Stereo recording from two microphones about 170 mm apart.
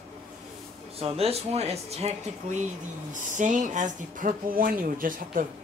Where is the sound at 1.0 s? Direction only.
35° right (ahead or behind); by 5.5 s 55° right (ahead or behind).